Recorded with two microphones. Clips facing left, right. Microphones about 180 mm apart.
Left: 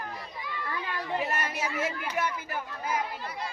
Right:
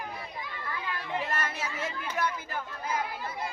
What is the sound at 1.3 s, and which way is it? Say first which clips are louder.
Chatter: left 1 dB; 15° left (ahead or behind).